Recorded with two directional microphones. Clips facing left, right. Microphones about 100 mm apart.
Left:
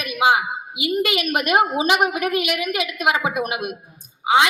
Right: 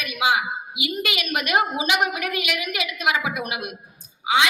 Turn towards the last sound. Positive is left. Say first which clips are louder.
# left 4 dB
turn(degrees=45)  # may be behind; listen again after turning